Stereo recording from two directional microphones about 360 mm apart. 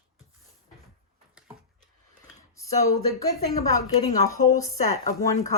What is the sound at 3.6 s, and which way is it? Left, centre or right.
Speech, centre.